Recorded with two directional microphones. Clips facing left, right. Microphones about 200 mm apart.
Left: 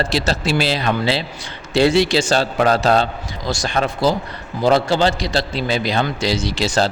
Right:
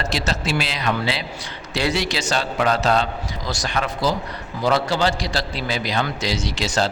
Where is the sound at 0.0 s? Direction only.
30° left (ahead or behind).